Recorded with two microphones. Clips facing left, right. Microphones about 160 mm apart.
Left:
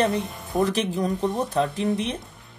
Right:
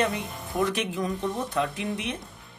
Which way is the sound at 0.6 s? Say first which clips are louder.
Left 4 dB; 35° left (ahead or behind).